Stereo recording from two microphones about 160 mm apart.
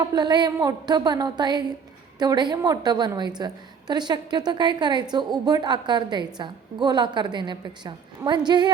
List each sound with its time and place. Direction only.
0.0 s a woman's voice: 25° right (ahead or behind)